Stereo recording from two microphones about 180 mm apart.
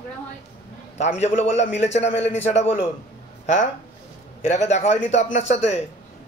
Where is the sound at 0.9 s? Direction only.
40° left (ahead or behind).